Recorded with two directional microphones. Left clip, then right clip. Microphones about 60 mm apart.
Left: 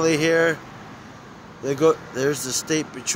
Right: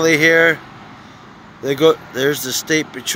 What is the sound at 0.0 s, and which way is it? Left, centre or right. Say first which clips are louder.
Speech: right 7 dB; centre.